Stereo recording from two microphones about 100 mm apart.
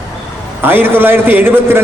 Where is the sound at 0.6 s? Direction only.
20° right (ahead or behind).